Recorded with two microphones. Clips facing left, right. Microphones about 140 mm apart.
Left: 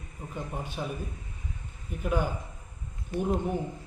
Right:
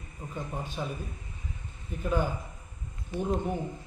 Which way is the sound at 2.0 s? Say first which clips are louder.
Even; 15° left (ahead or behind).